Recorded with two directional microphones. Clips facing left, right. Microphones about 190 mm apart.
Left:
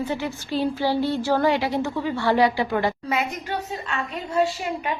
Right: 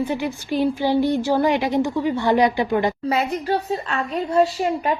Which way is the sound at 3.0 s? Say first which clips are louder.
Right 5 dB; 35° right (ahead or behind).